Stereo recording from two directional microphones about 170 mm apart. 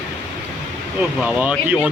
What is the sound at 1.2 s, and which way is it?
Speech, 5° right (ahead or behind).